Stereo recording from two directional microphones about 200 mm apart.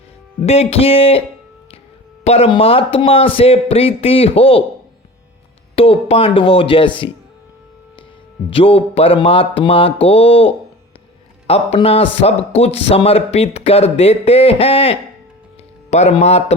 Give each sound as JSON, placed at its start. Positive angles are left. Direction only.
{"t": 0.4, "sound": "speech", "side_deg": 30}
{"t": 2.2, "sound": "speech", "side_deg": 30}
{"t": 5.7, "sound": "speech", "side_deg": 30}
{"t": 8.4, "sound": "speech", "side_deg": 30}